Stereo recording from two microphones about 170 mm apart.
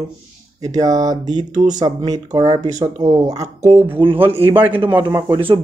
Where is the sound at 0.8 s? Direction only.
20° right (ahead or behind).